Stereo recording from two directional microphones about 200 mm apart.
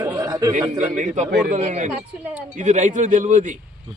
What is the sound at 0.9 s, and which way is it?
A man's voice, 35° right (ahead or behind).